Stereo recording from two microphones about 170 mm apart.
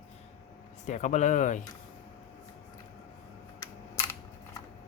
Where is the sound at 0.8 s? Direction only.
45° left (ahead or behind).